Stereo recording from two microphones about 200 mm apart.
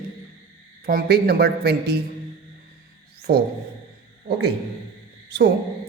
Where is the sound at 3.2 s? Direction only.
55° right (ahead or behind).